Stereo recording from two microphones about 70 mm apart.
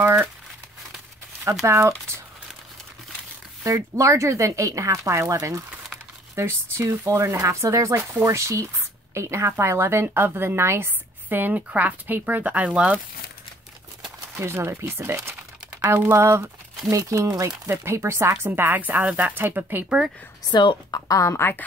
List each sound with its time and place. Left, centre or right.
0.0 s a woman's voice: right
1.4 s speech: right
3.6 s a woman's voice: right
11.2 s speech: right
14.4 s a woman's voice: right
18.3 s speech: right
20.5 s a woman's voice: left
21.2 s a woman's voice: left